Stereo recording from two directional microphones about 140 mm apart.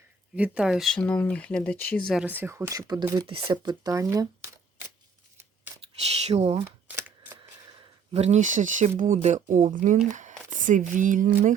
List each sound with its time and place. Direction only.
0.3 s speech: 10° right (ahead or behind)
0.9 s speech: 10° left (ahead or behind)
2.2 s speech: 15° right (ahead or behind)
5.8 s speech: 45° right (ahead or behind)
6.7 s camera: 15° right (ahead or behind)
8.1 s speech: 50° right (ahead or behind); by 11.5 s 80° right